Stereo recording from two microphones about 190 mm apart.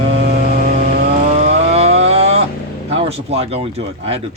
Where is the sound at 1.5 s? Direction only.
35° right (ahead or behind).